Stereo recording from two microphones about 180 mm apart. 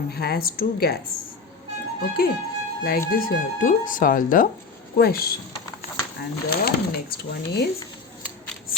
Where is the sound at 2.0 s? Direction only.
55° left (ahead or behind).